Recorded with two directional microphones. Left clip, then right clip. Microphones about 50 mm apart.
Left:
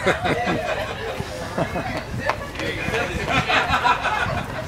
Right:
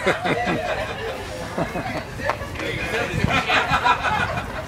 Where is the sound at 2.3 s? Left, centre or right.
Left.